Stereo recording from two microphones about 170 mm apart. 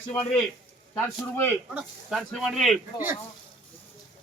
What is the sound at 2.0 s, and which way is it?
Speech, centre (ahead or behind).